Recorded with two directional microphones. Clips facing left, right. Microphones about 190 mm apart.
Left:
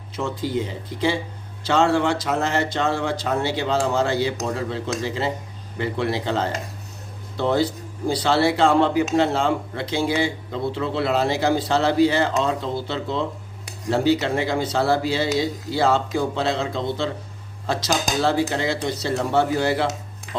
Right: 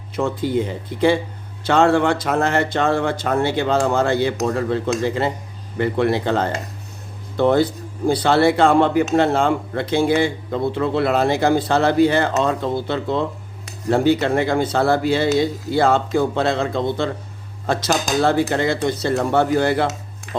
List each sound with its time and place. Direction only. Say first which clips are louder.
0.2 s speech: right 5 dB; 55° right (ahead or behind)